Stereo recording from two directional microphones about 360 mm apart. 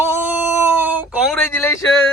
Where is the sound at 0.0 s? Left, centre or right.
Centre.